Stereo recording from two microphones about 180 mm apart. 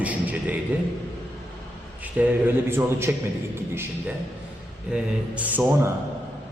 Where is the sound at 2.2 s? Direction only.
10° right (ahead or behind).